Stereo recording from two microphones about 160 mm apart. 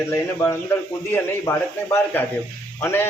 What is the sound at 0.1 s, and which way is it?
A man's voice, 15° left (ahead or behind).